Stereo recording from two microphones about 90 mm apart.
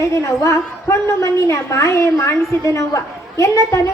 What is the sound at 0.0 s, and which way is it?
A woman's voice, 30° left (ahead or behind).